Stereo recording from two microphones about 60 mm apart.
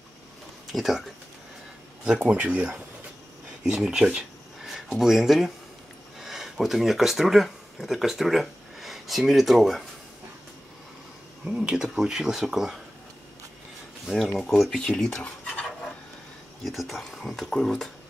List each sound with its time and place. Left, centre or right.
0.7 s speech: centre
2.0 s speech: right; by 9.8 s centre
11.4 s speech: centre
14.0 s speech: centre
16.6 s speech: centre